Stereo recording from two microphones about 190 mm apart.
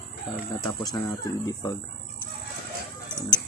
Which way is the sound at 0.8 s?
20° left (ahead or behind).